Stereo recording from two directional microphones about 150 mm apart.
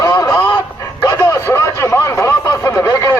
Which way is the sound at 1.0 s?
20° left (ahead or behind).